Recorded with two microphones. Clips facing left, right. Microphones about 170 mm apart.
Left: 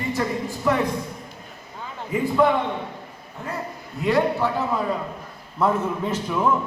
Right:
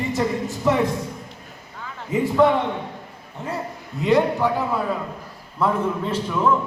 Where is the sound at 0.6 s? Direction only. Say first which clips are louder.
Right 2 dB; 20° right (ahead or behind).